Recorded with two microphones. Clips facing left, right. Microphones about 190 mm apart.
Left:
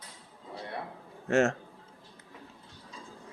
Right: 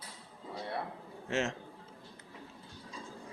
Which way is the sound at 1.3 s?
45° left (ahead or behind).